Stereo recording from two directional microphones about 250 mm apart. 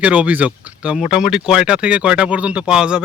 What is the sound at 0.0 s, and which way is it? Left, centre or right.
Speech, centre.